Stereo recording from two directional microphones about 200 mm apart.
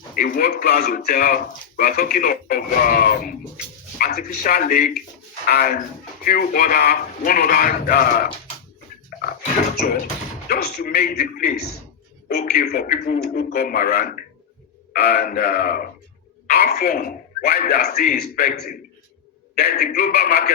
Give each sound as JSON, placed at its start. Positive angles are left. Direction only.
{"t": 0.2, "sound": "speech", "side_deg": 45}
{"t": 9.1, "sound": "a sound", "side_deg": 45}
{"t": 9.7, "sound": "speech", "side_deg": 45}